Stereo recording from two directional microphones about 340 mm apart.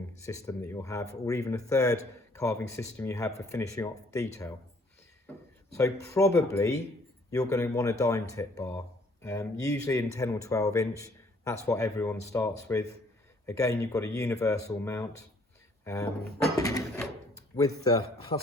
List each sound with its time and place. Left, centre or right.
0.3 s speech: centre
5.7 s speech: centre